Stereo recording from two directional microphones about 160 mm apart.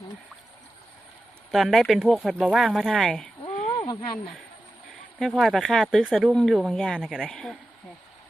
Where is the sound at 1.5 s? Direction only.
Centre (ahead or behind).